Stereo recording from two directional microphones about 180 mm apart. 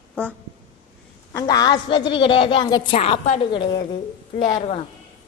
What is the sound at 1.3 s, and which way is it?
A woman's voice, 20° left (ahead or behind).